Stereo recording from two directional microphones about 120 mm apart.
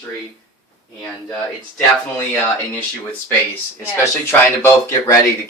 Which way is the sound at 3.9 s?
20° left (ahead or behind).